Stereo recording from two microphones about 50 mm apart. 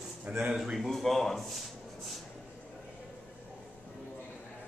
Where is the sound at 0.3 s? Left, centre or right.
Right.